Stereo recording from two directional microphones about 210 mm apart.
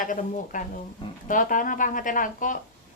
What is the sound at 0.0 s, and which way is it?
Speech, 40° left (ahead or behind).